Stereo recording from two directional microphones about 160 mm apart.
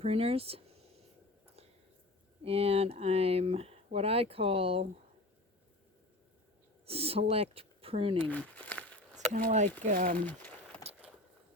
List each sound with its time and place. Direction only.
0.0 s speech: 40° right (ahead or behind)
2.4 s speech: 40° right (ahead or behind)
6.8 s speech: 35° right (ahead or behind)
8.3 s crumpling: 10° left (ahead or behind)
9.3 s speech: 45° right (ahead or behind)
10.2 s speech: 10° left (ahead or behind)